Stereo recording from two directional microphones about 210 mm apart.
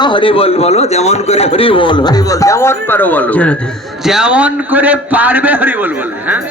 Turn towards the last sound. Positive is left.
turn(degrees=-10)  # may be behind; listen again after turning